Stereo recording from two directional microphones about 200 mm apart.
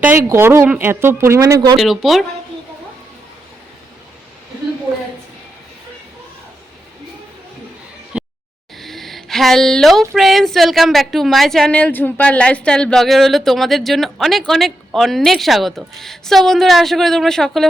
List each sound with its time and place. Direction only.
0.0 s speech: 10° right (ahead or behind)
1.8 s a woman's voice: centre (ahead or behind)
8.1 s a sound: 5° right (ahead or behind)
10.2 s a woman's voice: centre (ahead or behind)